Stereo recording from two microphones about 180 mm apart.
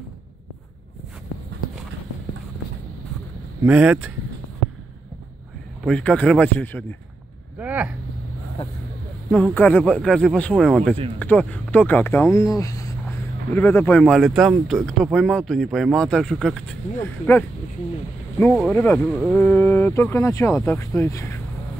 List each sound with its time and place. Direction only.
3.6 s speech: 10° right (ahead or behind)
5.9 s speech: 5° left (ahead or behind)
7.5 s speech: 10° right (ahead or behind)
8.6 s speech: 35° left (ahead or behind)
9.3 s speech: 10° left (ahead or behind)
18.7 s speech: 10° left (ahead or behind)